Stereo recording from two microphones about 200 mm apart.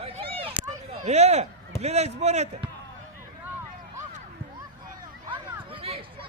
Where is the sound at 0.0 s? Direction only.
30° right (ahead or behind).